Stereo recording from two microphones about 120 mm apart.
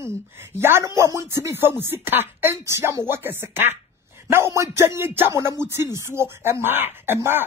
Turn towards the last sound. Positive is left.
turn(degrees=-20)  # may be behind; listen again after turning